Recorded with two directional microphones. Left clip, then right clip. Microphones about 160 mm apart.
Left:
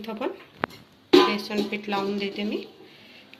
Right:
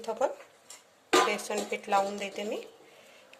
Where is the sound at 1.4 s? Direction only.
50° right (ahead or behind).